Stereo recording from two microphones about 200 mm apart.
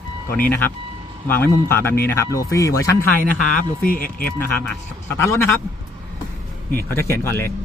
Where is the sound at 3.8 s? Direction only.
45° left (ahead or behind).